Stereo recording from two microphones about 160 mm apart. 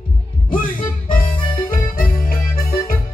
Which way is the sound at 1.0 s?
60° left (ahead or behind).